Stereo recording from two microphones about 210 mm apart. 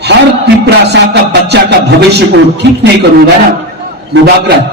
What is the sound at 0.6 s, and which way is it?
A man's voice, 55° right (ahead or behind).